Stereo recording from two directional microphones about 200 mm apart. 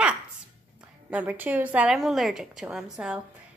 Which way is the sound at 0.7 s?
5° right (ahead or behind).